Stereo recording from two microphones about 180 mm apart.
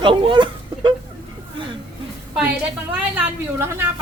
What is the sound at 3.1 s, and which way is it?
Speech, 15° right (ahead or behind).